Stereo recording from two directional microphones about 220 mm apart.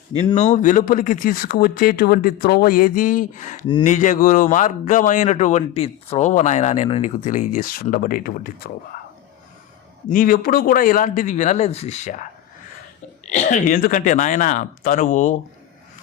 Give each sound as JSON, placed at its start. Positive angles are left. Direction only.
{"t": 0.1, "sound": "a man's voice", "side_deg": 25}
{"t": 10.1, "sound": "a man's voice", "side_deg": 40}
{"t": 13.2, "sound": "a man's voice", "side_deg": 35}